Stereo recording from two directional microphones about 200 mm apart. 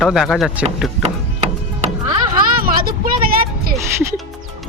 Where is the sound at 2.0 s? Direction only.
20° right (ahead or behind).